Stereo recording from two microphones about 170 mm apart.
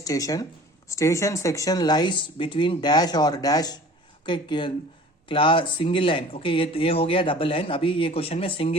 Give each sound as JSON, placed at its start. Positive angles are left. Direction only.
{"t": 0.0, "sound": "speech", "side_deg": 20}